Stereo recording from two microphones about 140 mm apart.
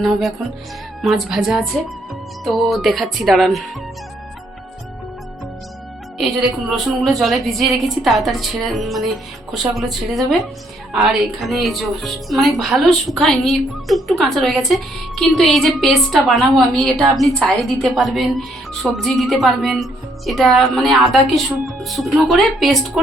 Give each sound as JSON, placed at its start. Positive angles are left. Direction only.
{"t": 0.0, "sound": "a woman's voice", "side_deg": 0}
{"t": 6.1, "sound": "a woman's voice", "side_deg": -5}